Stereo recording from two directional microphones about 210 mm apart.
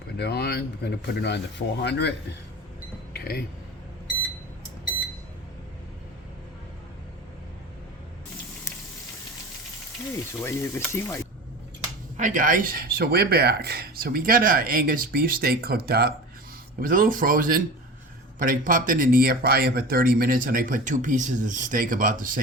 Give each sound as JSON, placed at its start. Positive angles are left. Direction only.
{"t": 0.2, "sound": "speech", "side_deg": 50}
{"t": 3.1, "sound": "a sound", "side_deg": 50}
{"t": 10.4, "sound": "speech", "side_deg": 10}
{"t": 12.1, "sound": "speech", "side_deg": -35}